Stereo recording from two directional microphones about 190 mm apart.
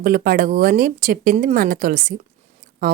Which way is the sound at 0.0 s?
50° right (ahead or behind).